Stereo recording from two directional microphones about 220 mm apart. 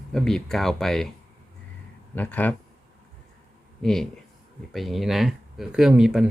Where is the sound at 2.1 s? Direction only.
5° left (ahead or behind).